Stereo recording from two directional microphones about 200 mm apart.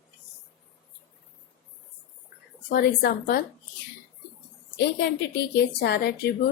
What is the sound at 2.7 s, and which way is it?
Speech, 50° left (ahead or behind).